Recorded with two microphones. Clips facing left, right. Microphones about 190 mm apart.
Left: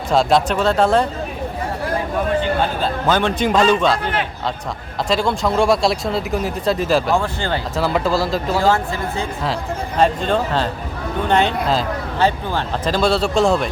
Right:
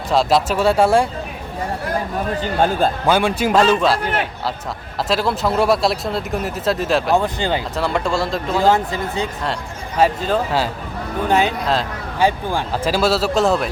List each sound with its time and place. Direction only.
0.1 s speech: centre (ahead or behind)
2.4 s speech: 45° right (ahead or behind)
3.1 s speech: 10° right (ahead or behind)
5.0 s speech: 5° right (ahead or behind)
7.2 s speech: 15° right (ahead or behind)
7.8 s speech: centre (ahead or behind)
8.7 s speech: 20° right (ahead or behind)
10.0 s speech: 5° right (ahead or behind)